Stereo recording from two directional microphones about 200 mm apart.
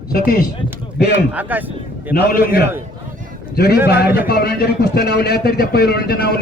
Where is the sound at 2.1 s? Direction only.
50° left (ahead or behind).